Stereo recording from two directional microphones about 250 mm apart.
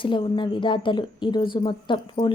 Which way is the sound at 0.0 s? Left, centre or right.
Centre.